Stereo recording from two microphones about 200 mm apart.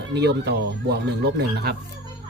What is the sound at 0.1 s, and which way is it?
Speech, 55° right (ahead or behind).